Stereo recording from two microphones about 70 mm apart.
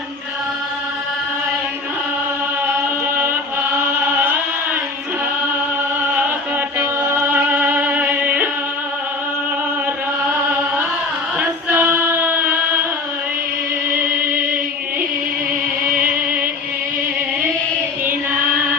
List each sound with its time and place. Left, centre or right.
4.2 s chant: right
6.7 s music: right
11.3 s female singing: right